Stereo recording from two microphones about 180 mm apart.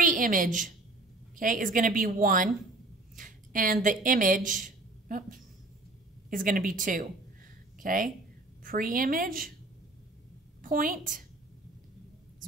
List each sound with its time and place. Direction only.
0.0 s a woman's voice: 45° right (ahead or behind)
3.2 s a sound: 45° right (ahead or behind)
4.0 s a woman's voice: 50° right (ahead or behind)
10.6 s a woman's voice: 50° right (ahead or behind)